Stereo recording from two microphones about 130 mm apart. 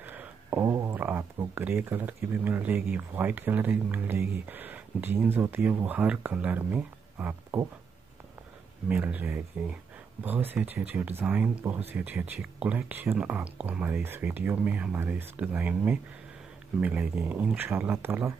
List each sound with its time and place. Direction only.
0.0 s a sound: 15° right (ahead or behind)
0.9 s speech: 15° right (ahead or behind)
8.8 s speech: 10° right (ahead or behind)